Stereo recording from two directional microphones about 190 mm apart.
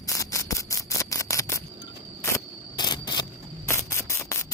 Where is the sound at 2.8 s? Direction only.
20° left (ahead or behind).